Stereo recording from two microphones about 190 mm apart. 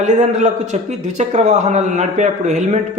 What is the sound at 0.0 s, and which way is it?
A man's voice, 40° right (ahead or behind).